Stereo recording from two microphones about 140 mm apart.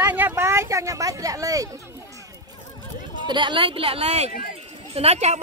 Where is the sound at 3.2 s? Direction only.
35° right (ahead or behind).